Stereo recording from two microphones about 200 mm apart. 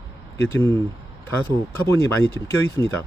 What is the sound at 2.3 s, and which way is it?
Speech, 10° left (ahead or behind).